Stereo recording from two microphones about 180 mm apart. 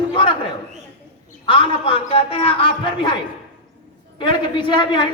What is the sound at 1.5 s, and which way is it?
A woman's voice, 30° left (ahead or behind).